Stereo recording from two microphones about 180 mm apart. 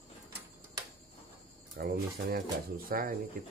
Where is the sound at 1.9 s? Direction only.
50° right (ahead or behind).